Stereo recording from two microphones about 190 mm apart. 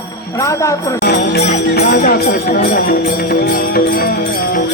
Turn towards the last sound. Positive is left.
turn(degrees=50)  # may be behind; listen again after turning